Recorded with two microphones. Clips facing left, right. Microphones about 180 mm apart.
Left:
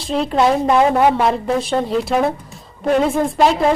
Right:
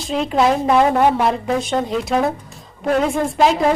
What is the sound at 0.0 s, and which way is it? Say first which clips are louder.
Speech: left 1 dB; centre (ahead or behind).